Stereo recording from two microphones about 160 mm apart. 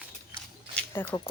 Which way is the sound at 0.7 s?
15° left (ahead or behind).